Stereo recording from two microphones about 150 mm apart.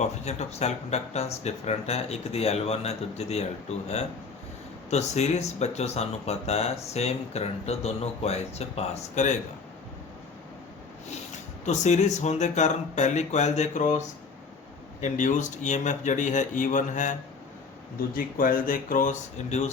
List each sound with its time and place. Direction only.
0.0 s speech: 50° left (ahead or behind)
4.9 s speech: 50° left (ahead or behind)
11.6 s speech: 50° left (ahead or behind)
15.0 s speech: 55° left (ahead or behind)
18.1 s speech: 70° left (ahead or behind); by 19.7 s 50° left (ahead or behind)